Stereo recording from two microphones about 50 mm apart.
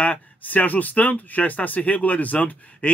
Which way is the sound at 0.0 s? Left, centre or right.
Left.